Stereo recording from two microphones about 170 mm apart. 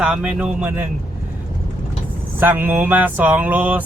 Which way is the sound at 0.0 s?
5° right (ahead or behind).